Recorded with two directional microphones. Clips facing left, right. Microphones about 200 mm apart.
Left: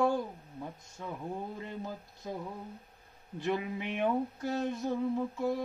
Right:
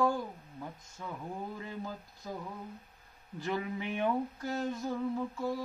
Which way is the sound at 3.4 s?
20° left (ahead or behind).